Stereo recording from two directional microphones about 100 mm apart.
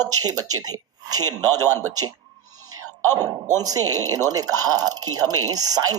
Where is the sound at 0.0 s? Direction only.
40° right (ahead or behind).